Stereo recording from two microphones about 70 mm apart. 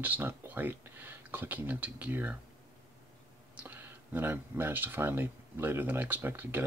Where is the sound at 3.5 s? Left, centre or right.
Right.